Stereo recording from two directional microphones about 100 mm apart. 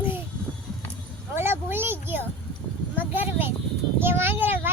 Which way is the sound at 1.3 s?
25° right (ahead or behind).